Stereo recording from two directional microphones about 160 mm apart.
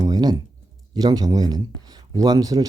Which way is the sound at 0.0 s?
25° right (ahead or behind).